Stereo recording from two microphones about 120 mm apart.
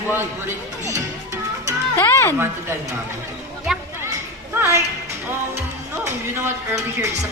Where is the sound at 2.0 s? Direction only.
25° left (ahead or behind).